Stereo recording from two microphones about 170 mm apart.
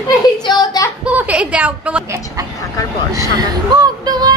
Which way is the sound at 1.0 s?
10° right (ahead or behind).